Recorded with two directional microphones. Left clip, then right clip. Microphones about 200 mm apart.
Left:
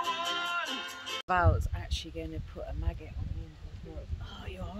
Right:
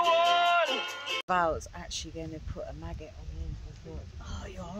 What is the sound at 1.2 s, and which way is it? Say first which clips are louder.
Speech: even; 30° right (ahead or behind).